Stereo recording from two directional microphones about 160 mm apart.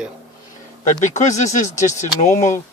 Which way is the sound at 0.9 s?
50° left (ahead or behind).